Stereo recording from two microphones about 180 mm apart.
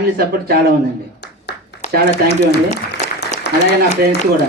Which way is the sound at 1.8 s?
40° left (ahead or behind).